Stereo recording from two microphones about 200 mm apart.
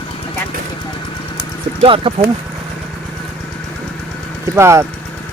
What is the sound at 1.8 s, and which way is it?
Speech, 25° right (ahead or behind).